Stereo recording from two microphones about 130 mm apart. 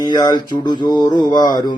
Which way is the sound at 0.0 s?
35° left (ahead or behind).